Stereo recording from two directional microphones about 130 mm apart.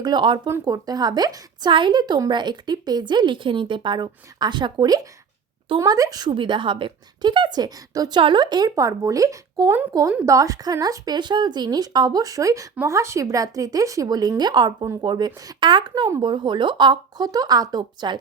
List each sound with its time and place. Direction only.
0.0 s a woman's voice: 35° right (ahead or behind)
0.4 s a woman's voice: 25° right (ahead or behind)